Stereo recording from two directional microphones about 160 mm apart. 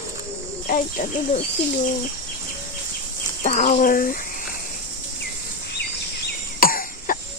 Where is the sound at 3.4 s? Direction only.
55° left (ahead or behind).